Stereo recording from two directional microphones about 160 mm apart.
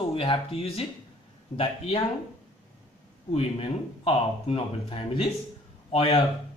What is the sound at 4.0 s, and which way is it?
Speech, 40° left (ahead or behind).